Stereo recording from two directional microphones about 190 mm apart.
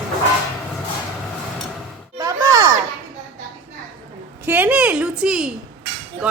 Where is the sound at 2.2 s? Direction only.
20° right (ahead or behind).